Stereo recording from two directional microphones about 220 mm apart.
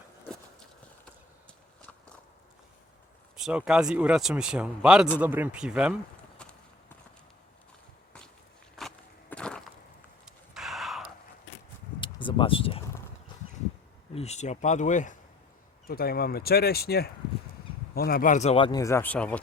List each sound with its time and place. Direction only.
1.0 s walk: 5° left (ahead or behind)
3.3 s speech: 5° right (ahead or behind)
6.4 s walk: 5° left (ahead or behind)
8.8 s walk: centre (ahead or behind)
9.3 s a sound: 5° left (ahead or behind)
11.9 s a sound: 20° left (ahead or behind)
14.2 s speech: 30° left (ahead or behind); by 19.4 s 5° left (ahead or behind)